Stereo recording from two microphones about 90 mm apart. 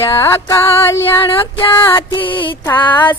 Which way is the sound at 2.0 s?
65° left (ahead or behind).